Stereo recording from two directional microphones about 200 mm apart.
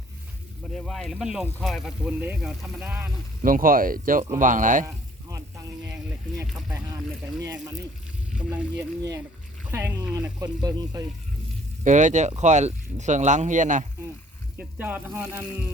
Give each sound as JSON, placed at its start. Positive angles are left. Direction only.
{"t": 0.7, "sound": "speech", "side_deg": 0}
{"t": 3.4, "sound": "speech", "side_deg": -45}
{"t": 8.4, "sound": "speech", "side_deg": -5}
{"t": 11.8, "sound": "speech", "side_deg": -40}
{"t": 14.6, "sound": "speech", "side_deg": -10}